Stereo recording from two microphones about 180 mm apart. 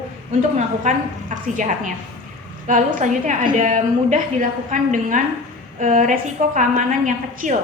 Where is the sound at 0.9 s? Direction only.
45° right (ahead or behind).